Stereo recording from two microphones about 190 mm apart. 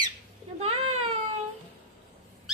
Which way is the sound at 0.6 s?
35° right (ahead or behind).